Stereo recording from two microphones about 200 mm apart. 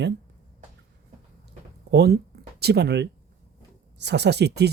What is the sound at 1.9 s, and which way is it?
Speech, 55° right (ahead or behind).